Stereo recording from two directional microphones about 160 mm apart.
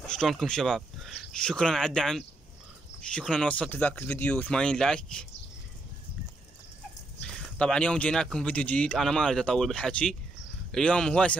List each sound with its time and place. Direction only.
0.1 s speech: centre (ahead or behind)
7.2 s speech: 5° left (ahead or behind)